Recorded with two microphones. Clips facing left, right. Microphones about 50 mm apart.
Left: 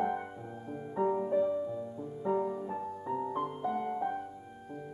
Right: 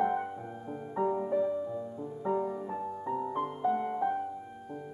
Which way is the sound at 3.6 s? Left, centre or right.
Centre.